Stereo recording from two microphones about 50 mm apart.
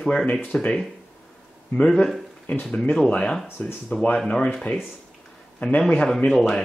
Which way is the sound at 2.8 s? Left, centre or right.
Centre.